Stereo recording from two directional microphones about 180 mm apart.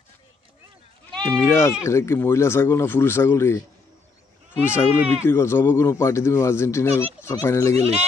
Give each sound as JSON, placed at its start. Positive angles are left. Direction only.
{"t": 1.3, "sound": "speech", "side_deg": 15}
{"t": 4.6, "sound": "speech", "side_deg": 15}